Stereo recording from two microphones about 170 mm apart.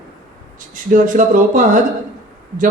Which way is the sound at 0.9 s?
50° right (ahead or behind).